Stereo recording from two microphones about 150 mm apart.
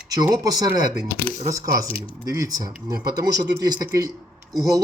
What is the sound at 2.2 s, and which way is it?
Speech, 25° right (ahead or behind).